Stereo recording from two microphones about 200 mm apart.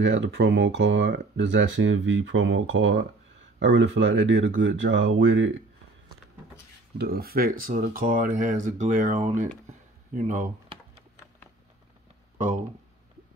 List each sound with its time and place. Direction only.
0.0 s speech: 65° right (ahead or behind)
7.0 s speech: 50° right (ahead or behind)